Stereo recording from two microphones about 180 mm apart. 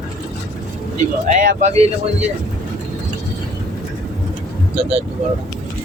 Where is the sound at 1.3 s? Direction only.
45° right (ahead or behind).